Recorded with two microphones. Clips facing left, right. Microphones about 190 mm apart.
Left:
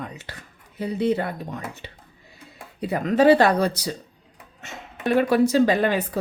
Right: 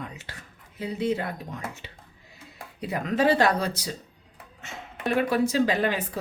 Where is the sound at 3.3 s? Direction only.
60° left (ahead or behind).